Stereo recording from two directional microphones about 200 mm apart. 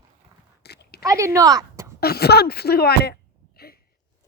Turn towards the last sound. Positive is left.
turn(degrees=50)  # may be behind; listen again after turning